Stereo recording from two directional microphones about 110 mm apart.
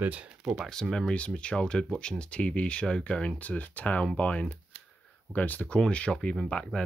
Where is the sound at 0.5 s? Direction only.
5° left (ahead or behind).